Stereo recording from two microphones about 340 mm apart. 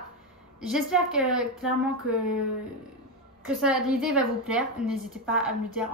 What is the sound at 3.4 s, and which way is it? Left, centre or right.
A woman's voice, centre.